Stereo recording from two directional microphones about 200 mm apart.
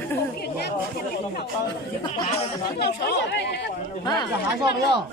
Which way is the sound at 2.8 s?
55° left (ahead or behind).